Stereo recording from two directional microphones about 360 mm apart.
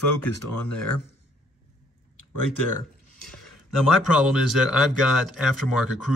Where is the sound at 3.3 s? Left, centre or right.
Centre.